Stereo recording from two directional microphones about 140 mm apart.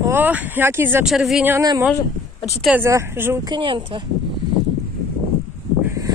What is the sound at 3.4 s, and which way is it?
Speech, 35° right (ahead or behind).